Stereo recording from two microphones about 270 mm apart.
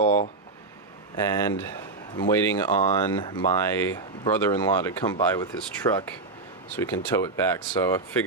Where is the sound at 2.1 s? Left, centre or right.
Centre.